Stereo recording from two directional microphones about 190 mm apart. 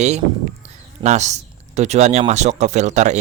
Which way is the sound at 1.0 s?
35° right (ahead or behind).